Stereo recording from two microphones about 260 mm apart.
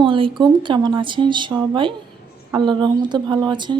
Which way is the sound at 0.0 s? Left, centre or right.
Centre.